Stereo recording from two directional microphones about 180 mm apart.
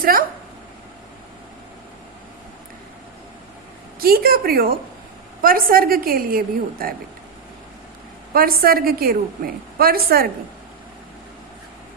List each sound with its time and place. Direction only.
0.0 s speech: 55° right (ahead or behind)
4.0 s a woman's voice: 55° right (ahead or behind)
8.3 s a woman's voice: 55° right (ahead or behind)